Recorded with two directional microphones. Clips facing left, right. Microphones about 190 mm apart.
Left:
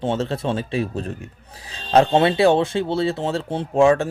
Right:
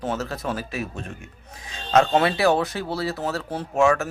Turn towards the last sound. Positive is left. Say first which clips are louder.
# left 4 dB
turn(degrees=30)  # may be behind; listen again after turning